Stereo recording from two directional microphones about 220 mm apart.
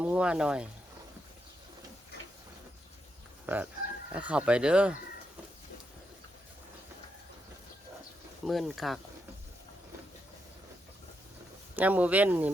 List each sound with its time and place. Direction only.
0.0 s speech: 5° right (ahead or behind)
3.4 s speech: 5° right (ahead or behind)
8.4 s speech: centre (ahead or behind)
11.8 s speech: 5° right (ahead or behind)